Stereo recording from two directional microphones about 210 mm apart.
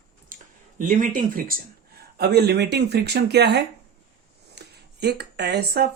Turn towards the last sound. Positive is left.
turn(degrees=-50)  # may be behind; listen again after turning